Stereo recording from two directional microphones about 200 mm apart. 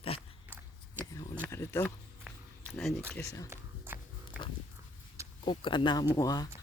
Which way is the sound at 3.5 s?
10° right (ahead or behind).